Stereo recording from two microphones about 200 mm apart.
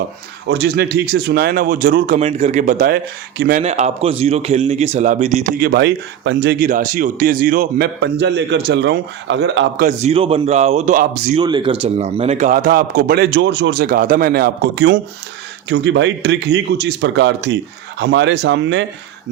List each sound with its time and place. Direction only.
0.4 s a man's voice: 60° right (ahead or behind); by 2.1 s 45° right (ahead or behind)
2.1 s a man's voice: 30° right (ahead or behind); by 3.6 s 55° right (ahead or behind)
3.6 s a man's voice: 35° right (ahead or behind)
5.5 s speech: 55° right (ahead or behind)
6.7 s a man's voice: 40° right (ahead or behind)
8.2 s speech: 60° right (ahead or behind)
9.8 s a man's voice: 30° right (ahead or behind)
11.3 s a man's voice: 25° right (ahead or behind); by 18.9 s 65° right (ahead or behind)